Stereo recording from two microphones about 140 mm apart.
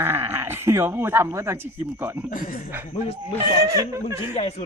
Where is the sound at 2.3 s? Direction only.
75° left (ahead or behind).